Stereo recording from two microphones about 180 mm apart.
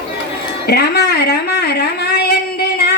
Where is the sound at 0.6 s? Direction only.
60° left (ahead or behind).